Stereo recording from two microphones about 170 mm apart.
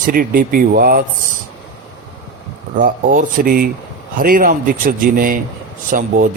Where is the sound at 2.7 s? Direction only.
55° right (ahead or behind).